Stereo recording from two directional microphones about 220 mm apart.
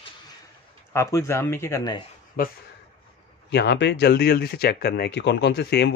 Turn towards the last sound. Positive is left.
turn(degrees=50)  # may be behind; listen again after turning